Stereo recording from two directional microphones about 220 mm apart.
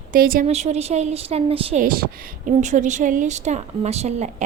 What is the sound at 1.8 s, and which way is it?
A woman's voice, 40° right (ahead or behind).